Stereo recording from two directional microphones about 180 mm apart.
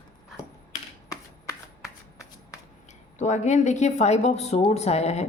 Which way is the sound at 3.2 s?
40° left (ahead or behind).